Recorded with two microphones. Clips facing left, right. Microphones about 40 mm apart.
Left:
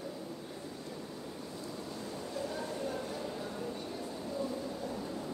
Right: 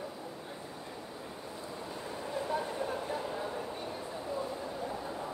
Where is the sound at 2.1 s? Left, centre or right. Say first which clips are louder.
Right 5 dB; right.